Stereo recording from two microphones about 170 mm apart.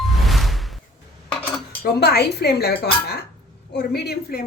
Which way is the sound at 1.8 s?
70° left (ahead or behind).